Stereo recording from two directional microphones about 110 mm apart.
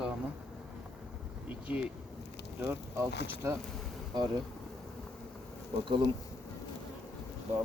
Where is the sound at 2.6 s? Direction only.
25° right (ahead or behind).